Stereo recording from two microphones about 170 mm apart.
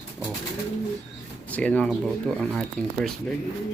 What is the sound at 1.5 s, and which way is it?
Speech, 5° left (ahead or behind).